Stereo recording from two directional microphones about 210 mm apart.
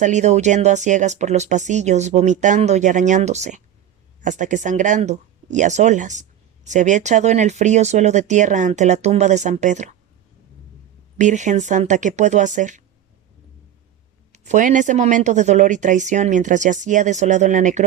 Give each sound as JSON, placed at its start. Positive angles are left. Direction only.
{"t": 0.0, "sound": "speech", "side_deg": -35}
{"t": 11.2, "sound": "speech", "side_deg": -35}
{"t": 14.3, "sound": "speech", "side_deg": -35}